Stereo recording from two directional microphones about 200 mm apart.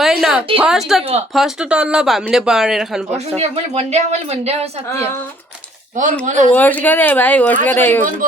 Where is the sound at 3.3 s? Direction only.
30° right (ahead or behind).